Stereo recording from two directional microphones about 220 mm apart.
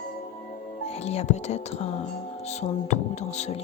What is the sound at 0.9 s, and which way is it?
Whispering, 30° left (ahead or behind).